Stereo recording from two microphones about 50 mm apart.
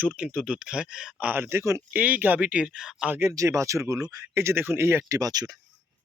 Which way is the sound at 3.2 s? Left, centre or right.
Right.